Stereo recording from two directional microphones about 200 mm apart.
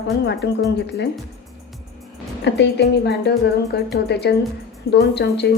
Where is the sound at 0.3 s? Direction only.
60° left (ahead or behind).